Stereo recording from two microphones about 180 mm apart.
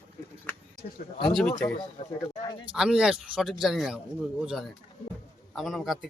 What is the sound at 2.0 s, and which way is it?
Speech, 35° left (ahead or behind).